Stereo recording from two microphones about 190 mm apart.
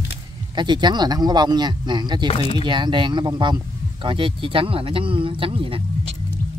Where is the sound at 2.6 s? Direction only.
25° right (ahead or behind).